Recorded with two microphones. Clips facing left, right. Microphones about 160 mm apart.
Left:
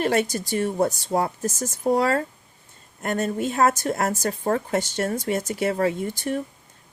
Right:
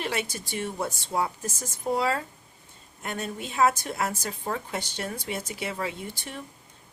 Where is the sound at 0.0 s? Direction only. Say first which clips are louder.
Left 9 dB; 45° left (ahead or behind).